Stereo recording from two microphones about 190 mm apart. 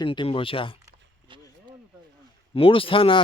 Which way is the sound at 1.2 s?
25° right (ahead or behind).